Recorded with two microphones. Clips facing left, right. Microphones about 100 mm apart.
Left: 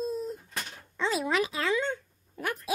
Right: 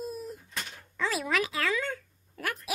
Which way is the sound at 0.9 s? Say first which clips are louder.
Left 2 dB; 25° left (ahead or behind).